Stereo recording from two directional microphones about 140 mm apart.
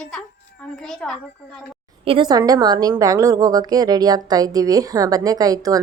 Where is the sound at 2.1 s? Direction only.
35° right (ahead or behind).